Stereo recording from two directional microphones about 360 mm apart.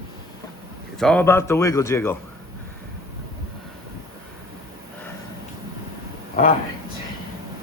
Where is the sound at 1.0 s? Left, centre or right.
Centre.